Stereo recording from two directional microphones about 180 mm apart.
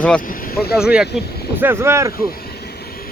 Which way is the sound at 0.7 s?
5° right (ahead or behind).